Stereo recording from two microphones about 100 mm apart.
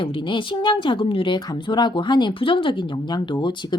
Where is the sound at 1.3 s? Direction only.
50° left (ahead or behind).